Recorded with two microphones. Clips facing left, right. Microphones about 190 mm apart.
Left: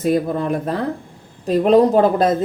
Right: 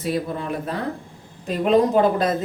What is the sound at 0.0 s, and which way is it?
Speech, 45° left (ahead or behind).